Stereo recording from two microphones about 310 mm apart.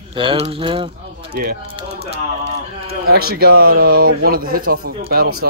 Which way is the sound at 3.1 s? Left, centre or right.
Right.